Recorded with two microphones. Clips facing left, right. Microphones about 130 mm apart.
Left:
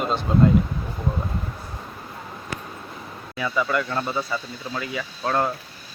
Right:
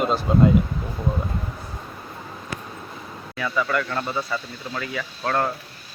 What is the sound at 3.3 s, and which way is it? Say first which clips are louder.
Speech: even; 20° left (ahead or behind).